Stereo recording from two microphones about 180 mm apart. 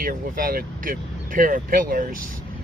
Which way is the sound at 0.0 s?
55° right (ahead or behind).